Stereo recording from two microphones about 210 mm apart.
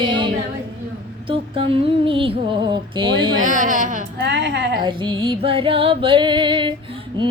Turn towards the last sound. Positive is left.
turn(degrees=-20)  # may be behind; listen again after turning